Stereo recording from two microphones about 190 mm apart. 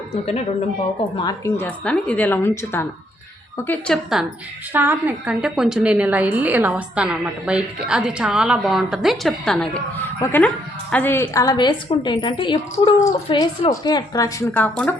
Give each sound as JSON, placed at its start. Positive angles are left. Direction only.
{"t": 1.2, "sound": "a woman's voice", "side_deg": 20}
{"t": 1.8, "sound": "a woman's voice", "side_deg": 5}
{"t": 4.7, "sound": "a woman's voice", "side_deg": -10}
{"t": 10.9, "sound": "a woman's voice", "side_deg": 10}